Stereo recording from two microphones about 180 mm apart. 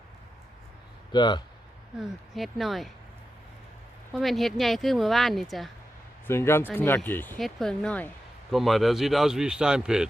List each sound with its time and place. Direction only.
1.1 s speech: 25° left (ahead or behind)
2.0 s speech: centre (ahead or behind)
4.1 s speech: centre (ahead or behind)
6.2 s speech: 15° left (ahead or behind); by 10.1 s 5° right (ahead or behind)